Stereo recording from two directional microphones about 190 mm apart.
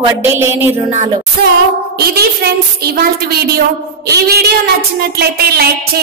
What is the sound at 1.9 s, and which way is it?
Speech, 55° right (ahead or behind).